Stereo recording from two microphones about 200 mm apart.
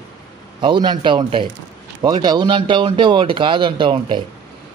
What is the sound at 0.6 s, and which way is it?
Speech, 25° right (ahead or behind).